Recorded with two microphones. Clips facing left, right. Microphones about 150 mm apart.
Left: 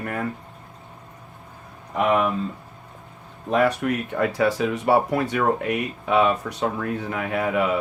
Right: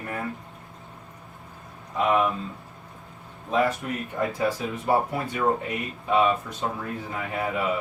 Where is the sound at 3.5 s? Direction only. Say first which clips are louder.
Left 4 dB; 70° left (ahead or behind).